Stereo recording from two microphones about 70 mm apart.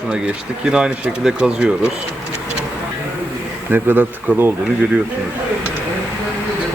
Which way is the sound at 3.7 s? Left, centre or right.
Right.